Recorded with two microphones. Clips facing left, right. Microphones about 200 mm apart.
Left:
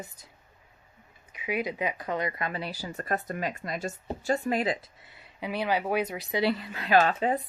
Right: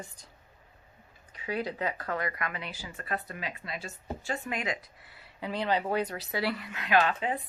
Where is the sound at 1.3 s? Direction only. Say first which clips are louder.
Left 2 dB; 10° left (ahead or behind).